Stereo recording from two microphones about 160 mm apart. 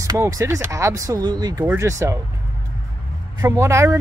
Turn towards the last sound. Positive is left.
turn(degrees=-15)  # may be behind; listen again after turning